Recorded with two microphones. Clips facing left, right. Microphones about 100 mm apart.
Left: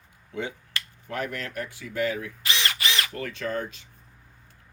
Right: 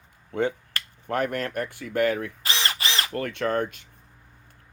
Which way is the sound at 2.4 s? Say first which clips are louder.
Even; 35° right (ahead or behind).